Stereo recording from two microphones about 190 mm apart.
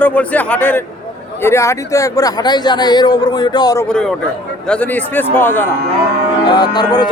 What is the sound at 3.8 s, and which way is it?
Speech, 5° left (ahead or behind).